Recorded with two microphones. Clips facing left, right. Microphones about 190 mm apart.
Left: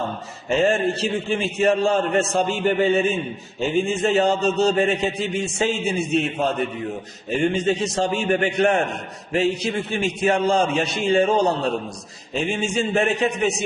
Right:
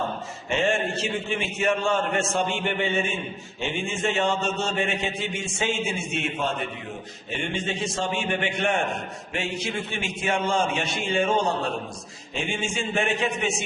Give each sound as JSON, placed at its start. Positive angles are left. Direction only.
{"t": 0.5, "sound": "a man's voice", "side_deg": 35}